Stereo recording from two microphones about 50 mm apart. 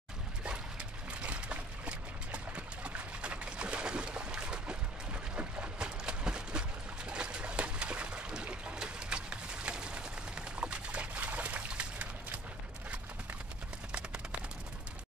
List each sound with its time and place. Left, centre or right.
0.4 s dog: right
7.1 s a sound: right
8.7 s pigeon: centre